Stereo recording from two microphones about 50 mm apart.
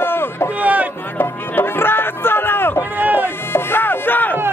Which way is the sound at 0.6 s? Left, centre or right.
Right.